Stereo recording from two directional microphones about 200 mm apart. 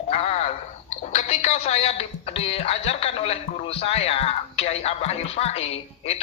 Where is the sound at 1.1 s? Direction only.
35° left (ahead or behind).